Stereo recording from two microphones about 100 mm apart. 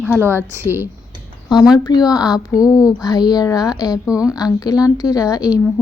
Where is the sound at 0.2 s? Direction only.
20° right (ahead or behind).